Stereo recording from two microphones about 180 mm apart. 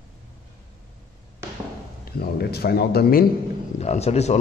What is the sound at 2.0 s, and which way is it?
Speech, 60° left (ahead or behind).